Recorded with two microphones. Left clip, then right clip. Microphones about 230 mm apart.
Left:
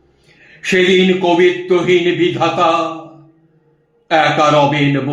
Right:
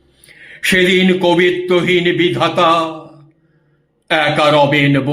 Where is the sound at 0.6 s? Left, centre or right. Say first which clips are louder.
Right 1 dB; right.